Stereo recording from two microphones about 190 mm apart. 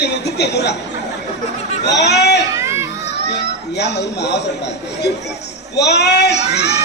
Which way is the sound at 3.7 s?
60° left (ahead or behind).